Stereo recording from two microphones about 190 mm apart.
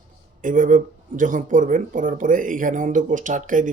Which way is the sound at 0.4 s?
45° right (ahead or behind).